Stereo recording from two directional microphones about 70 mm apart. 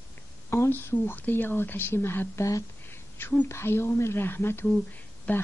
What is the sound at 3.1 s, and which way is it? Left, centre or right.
A woman's voice, left.